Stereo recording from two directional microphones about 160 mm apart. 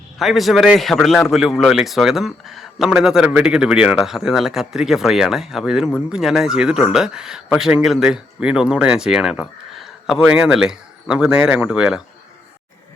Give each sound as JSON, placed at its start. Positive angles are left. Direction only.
{"t": 0.2, "sound": "speech", "side_deg": 0}